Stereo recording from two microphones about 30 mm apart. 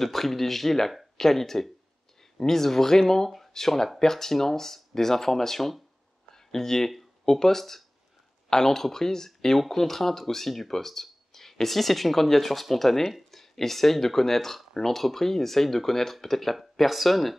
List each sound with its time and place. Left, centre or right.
0.0 s speech: centre